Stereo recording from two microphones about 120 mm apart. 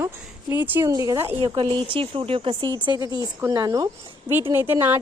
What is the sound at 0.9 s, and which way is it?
Speech, 30° right (ahead or behind).